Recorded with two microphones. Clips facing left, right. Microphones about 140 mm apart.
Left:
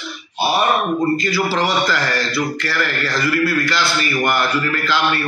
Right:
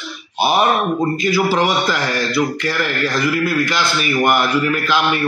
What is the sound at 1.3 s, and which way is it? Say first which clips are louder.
Speech: right 2 dB; 15° right (ahead or behind).